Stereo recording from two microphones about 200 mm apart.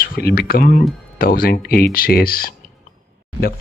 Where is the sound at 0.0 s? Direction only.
45° left (ahead or behind).